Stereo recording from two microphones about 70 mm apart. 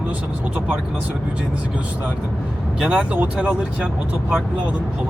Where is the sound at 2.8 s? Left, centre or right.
Centre.